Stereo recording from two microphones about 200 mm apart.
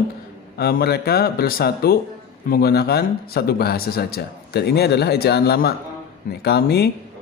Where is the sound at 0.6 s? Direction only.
50° left (ahead or behind).